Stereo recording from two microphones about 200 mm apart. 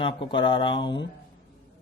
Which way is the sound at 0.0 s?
25° left (ahead or behind).